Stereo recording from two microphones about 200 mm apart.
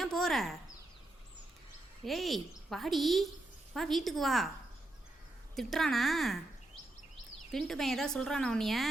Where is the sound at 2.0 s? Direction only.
Centre (ahead or behind).